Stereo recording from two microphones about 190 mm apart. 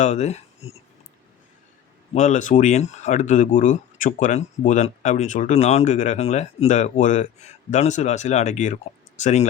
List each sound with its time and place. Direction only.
0.0 s speech: 35° left (ahead or behind)
2.1 s speech: 40° left (ahead or behind)